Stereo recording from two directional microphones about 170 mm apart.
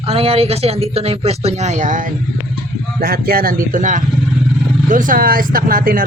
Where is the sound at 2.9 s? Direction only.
60° right (ahead or behind).